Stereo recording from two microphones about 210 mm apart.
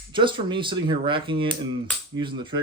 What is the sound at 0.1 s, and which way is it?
Speech, 20° right (ahead or behind).